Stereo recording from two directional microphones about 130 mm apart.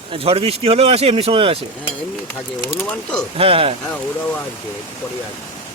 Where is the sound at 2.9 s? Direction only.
10° left (ahead or behind).